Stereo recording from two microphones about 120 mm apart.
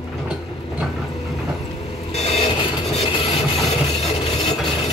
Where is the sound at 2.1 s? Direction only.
60° left (ahead or behind).